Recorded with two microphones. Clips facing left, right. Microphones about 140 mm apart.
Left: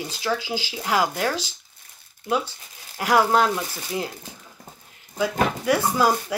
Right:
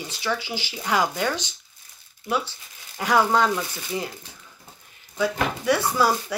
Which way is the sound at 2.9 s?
10° left (ahead or behind).